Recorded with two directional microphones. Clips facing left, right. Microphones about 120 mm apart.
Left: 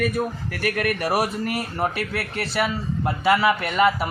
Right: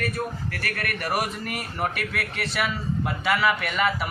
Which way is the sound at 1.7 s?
35° left (ahead or behind).